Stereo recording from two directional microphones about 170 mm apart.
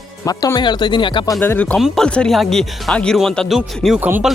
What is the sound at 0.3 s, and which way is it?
Speech, 20° left (ahead or behind).